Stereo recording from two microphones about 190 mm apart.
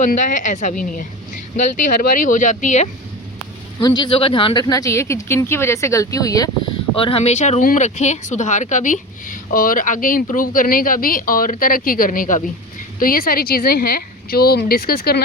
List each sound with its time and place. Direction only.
0.0 s speech: 40° left (ahead or behind)
3.8 s speech: 25° left (ahead or behind)
6.9 s speech: 30° left (ahead or behind); by 15.2 s 55° left (ahead or behind)